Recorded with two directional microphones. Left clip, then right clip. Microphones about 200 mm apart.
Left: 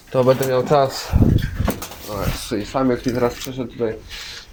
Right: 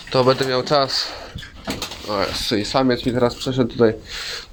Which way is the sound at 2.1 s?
10° right (ahead or behind).